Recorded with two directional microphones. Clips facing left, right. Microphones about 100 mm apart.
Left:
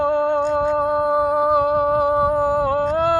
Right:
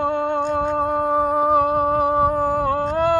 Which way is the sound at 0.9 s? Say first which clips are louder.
Left 1 dB; 20° left (ahead or behind).